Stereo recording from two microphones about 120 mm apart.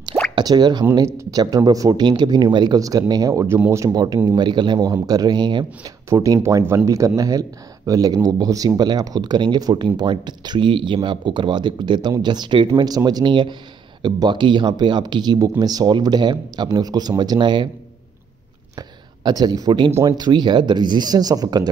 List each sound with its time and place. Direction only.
0.4 s speech: 35° right (ahead or behind)
18.8 s speech: 35° right (ahead or behind)